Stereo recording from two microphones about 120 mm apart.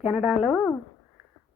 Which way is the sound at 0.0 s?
Centre (ahead or behind).